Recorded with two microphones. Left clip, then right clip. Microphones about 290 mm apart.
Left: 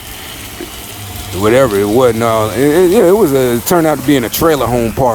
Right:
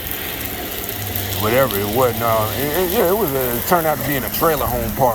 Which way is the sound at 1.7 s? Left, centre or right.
Left.